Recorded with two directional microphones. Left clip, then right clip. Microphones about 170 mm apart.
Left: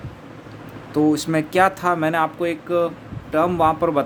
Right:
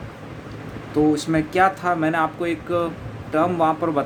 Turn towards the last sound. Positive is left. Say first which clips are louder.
# left 2 dB
turn(degrees=40)  # may be behind; listen again after turning